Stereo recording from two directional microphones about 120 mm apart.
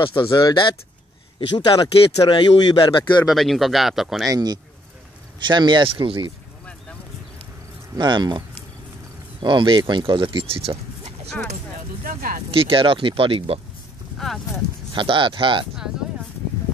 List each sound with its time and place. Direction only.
0.0 s speech: 45° left (ahead or behind)
1.7 s speech: 30° left (ahead or behind)
3.3 s speech: centre (ahead or behind)
4.3 s speech: 35° right (ahead or behind)
7.9 s speech: 40° right (ahead or behind); by 11.1 s 55° right (ahead or behind)
12.4 s speech: 50° right (ahead or behind)
14.1 s speech: centre (ahead or behind)
15.0 s speech: 45° right (ahead or behind)